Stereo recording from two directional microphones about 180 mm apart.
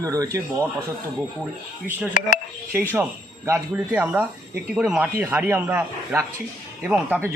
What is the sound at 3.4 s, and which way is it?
Speech, 15° right (ahead or behind).